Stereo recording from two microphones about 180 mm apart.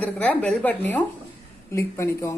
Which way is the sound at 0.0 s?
10° left (ahead or behind).